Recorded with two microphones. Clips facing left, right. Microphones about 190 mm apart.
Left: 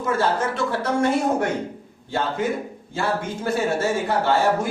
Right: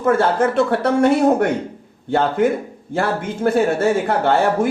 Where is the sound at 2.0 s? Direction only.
60° right (ahead or behind).